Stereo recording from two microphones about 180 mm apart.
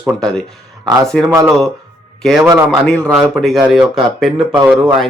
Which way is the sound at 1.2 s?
15° right (ahead or behind).